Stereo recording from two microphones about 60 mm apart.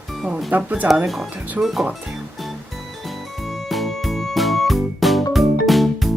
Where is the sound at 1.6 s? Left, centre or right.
Centre.